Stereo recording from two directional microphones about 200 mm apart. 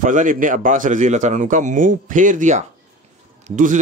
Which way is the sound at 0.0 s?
40° right (ahead or behind).